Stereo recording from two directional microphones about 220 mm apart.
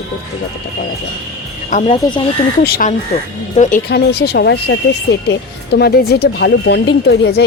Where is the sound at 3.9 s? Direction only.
45° left (ahead or behind).